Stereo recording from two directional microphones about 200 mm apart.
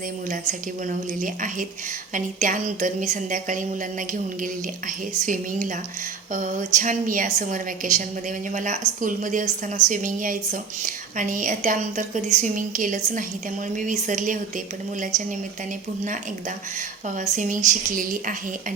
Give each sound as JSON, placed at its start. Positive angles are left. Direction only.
{"t": 0.9, "sound": "a woman's voice", "side_deg": -40}
{"t": 5.2, "sound": "a woman's voice", "side_deg": -40}
{"t": 17.2, "sound": "a woman's voice", "side_deg": -40}